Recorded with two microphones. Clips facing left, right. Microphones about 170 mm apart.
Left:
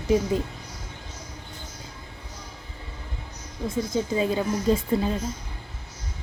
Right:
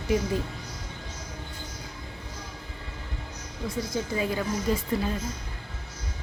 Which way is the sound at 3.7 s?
25° left (ahead or behind).